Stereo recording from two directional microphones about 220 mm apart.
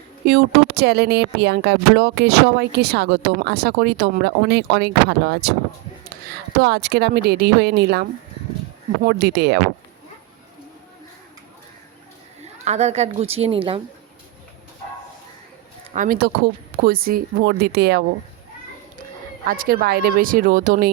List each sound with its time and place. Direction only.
0.3 s speech: 45° right (ahead or behind)
6.6 s speech: 50° right (ahead or behind)
12.4 s a woman's voice: 30° right (ahead or behind)
15.9 s speech: 35° right (ahead or behind)
19.5 s speech: 40° right (ahead or behind)